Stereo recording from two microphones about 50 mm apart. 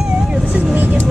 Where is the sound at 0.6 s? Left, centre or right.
Right.